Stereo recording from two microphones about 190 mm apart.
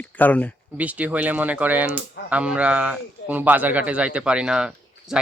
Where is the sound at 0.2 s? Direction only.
10° left (ahead or behind).